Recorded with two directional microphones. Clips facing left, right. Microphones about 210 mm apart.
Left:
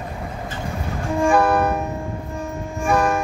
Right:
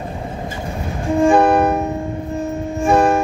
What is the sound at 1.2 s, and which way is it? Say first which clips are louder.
Music: right 4 dB; 20° right (ahead or behind).